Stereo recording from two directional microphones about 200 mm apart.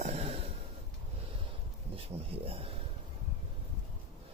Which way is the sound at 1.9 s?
30° right (ahead or behind).